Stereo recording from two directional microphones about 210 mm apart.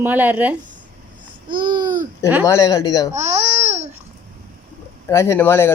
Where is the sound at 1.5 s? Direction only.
20° right (ahead or behind).